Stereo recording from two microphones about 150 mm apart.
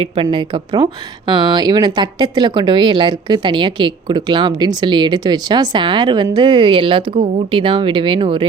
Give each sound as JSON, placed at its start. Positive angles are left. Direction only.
{"t": 0.0, "sound": "speech", "side_deg": -35}